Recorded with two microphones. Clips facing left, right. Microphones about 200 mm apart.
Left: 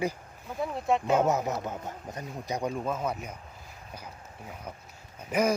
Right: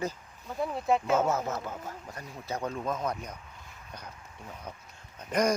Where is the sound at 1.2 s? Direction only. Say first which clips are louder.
Left 2 dB; 15° left (ahead or behind).